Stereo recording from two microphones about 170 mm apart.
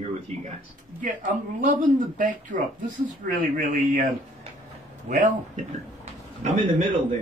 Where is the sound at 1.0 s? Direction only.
50° right (ahead or behind).